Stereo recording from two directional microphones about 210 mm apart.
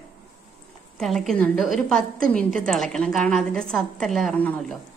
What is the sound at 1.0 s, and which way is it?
A woman's voice, centre (ahead or behind).